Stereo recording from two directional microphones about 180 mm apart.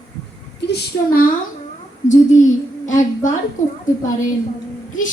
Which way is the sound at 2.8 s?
45° left (ahead or behind).